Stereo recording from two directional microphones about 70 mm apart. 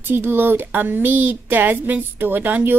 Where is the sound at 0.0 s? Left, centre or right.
Right.